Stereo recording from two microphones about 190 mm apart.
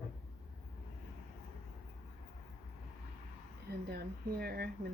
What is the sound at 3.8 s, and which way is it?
Speech, 55° right (ahead or behind).